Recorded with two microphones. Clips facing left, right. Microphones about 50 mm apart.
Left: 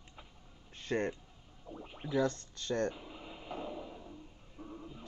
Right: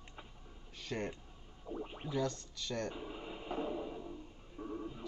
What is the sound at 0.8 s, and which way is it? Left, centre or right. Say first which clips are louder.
Speech: left 6 dB; left.